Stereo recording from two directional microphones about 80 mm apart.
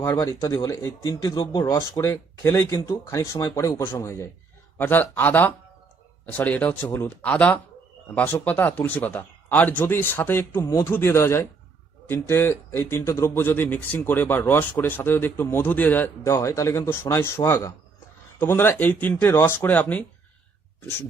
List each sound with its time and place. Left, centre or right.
0.3 s speech: left
2.0 s a man's voice: left
4.8 s a man's voice: left
16.2 s a man's voice: left